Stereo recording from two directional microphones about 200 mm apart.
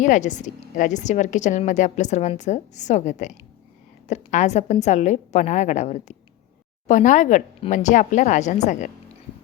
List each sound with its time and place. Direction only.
0.0 s a woman's voice: 40° left (ahead or behind)